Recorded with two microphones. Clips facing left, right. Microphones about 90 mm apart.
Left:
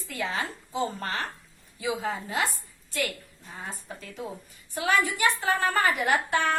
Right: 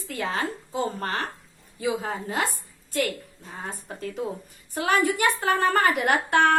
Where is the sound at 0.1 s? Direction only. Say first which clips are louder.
Right 3 dB; 45° right (ahead or behind).